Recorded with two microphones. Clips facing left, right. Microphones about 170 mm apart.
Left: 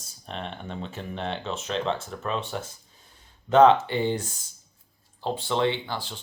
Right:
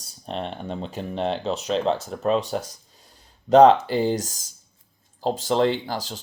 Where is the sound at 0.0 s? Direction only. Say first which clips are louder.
Right 5 dB; 35° right (ahead or behind).